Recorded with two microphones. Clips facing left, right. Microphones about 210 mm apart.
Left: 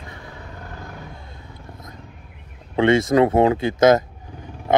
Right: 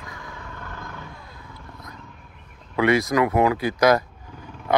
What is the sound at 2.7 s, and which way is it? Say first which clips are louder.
Speech: left 4 dB; 25° left (ahead or behind).